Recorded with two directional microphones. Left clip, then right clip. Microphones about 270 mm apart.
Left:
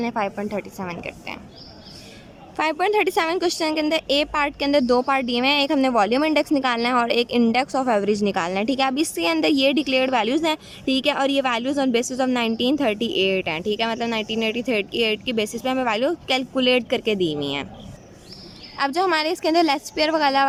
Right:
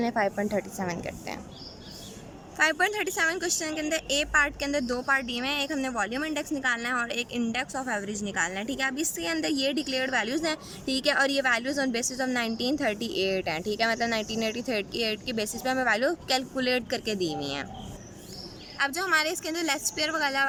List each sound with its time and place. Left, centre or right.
0.0 s a woman's voice: centre
2.6 s speech: centre
18.8 s speech: centre